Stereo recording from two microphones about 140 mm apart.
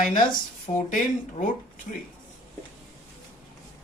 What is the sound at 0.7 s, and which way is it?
Speech, 50° left (ahead or behind).